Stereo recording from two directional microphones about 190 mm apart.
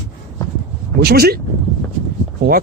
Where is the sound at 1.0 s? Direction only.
55° right (ahead or behind).